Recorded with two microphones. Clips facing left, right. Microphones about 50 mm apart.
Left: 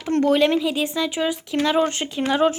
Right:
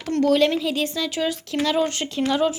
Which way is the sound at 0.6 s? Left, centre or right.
Centre.